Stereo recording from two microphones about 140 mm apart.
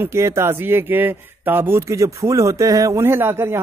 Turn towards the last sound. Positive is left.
turn(degrees=-15)  # may be behind; listen again after turning